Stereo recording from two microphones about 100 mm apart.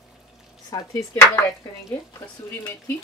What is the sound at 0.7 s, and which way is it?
Speech, 45° left (ahead or behind).